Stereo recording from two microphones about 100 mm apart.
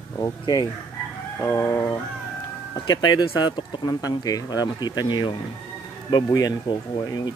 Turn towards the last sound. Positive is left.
turn(degrees=45)  # may be behind; listen again after turning